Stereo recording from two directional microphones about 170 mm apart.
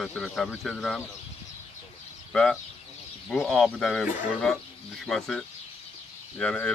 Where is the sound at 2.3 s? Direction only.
5° left (ahead or behind).